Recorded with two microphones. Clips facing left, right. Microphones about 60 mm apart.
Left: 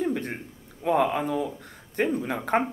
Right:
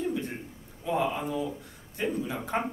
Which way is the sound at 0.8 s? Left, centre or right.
Left.